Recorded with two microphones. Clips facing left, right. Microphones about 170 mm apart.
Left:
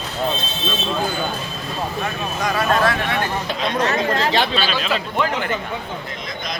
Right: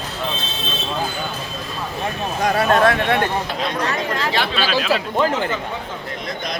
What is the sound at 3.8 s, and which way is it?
Speech, 25° left (ahead or behind).